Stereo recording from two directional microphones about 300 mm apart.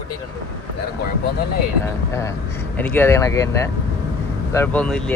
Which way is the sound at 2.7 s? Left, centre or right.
Centre.